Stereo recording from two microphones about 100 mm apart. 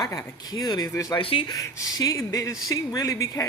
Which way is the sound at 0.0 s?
35° left (ahead or behind).